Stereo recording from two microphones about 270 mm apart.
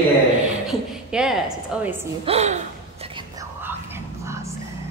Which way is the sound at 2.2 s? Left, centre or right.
Right.